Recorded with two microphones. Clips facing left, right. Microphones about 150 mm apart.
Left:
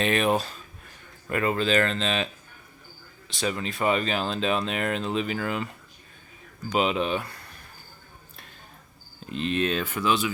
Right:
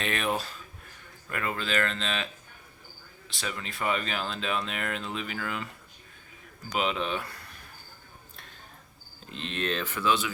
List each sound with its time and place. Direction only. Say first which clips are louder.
0.0 s speech: left 7 dB; 25° left (ahead or behind)
3.4 s speech: left 6 dB; 25° left (ahead or behind)
6.7 s speech: left 5 dB; 20° left (ahead or behind)
7.0 s speech: left 5 dB; 5° left (ahead or behind)
9.4 s speech: left 6 dB; 10° left (ahead or behind)